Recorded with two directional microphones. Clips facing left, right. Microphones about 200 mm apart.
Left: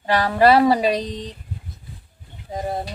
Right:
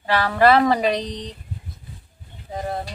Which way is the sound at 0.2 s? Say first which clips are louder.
Left 1 dB; 15° left (ahead or behind).